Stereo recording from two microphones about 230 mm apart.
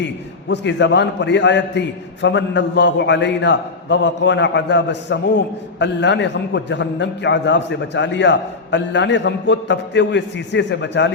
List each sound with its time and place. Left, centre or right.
0.0 s a man's voice: left